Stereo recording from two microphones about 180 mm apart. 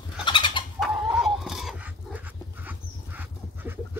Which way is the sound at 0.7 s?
Centre (ahead or behind).